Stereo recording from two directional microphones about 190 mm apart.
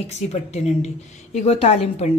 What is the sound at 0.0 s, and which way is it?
A woman's voice, 35° left (ahead or behind).